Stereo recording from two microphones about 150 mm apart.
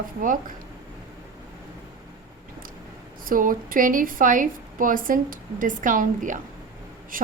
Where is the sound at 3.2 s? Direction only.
70° right (ahead or behind).